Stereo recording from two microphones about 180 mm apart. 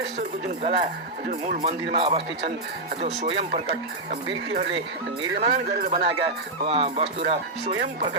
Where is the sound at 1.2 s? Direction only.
50° right (ahead or behind).